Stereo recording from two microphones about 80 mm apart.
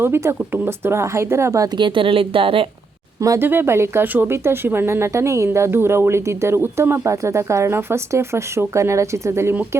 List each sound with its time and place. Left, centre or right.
0.0 s speech: right
1.7 s speech: right
3.3 s speech: right